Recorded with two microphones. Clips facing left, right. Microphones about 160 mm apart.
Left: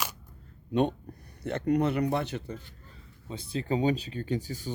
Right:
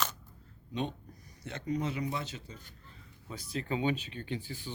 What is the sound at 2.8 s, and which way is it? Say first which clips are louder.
Speech: left 4 dB; 30° left (ahead or behind).